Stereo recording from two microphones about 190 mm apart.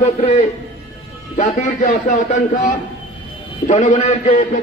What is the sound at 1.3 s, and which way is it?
Speech, 40° left (ahead or behind).